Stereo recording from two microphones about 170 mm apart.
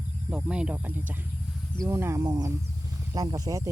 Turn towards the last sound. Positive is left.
turn(degrees=-20)  # may be behind; listen again after turning